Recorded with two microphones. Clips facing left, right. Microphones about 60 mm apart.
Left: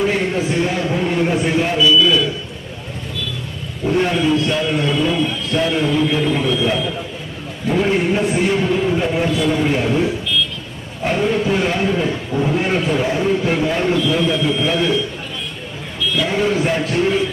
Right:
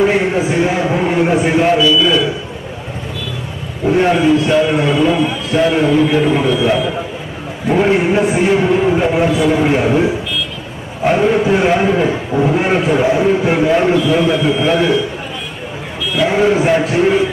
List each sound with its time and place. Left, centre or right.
0.2 s a sound: centre
3.9 s a man's voice: right
5.6 s a man's voice: right
11.0 s a man's voice: right
16.1 s a man's voice: centre